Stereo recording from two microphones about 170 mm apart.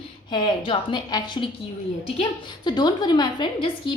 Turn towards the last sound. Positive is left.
turn(degrees=25)  # may be behind; listen again after turning